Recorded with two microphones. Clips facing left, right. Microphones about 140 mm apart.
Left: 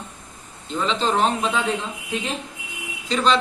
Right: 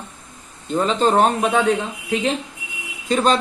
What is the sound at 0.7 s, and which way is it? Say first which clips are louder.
Speech: right 5 dB; 45° right (ahead or behind).